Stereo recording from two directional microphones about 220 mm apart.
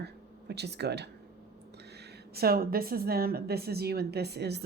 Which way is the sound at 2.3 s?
45° right (ahead or behind).